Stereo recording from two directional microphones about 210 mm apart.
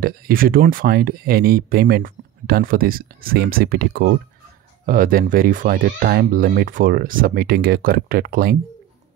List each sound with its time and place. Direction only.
0.0 s speech: 45° right (ahead or behind)